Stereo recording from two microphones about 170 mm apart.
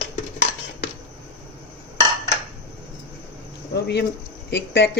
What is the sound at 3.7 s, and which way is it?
Cricket, 70° left (ahead or behind).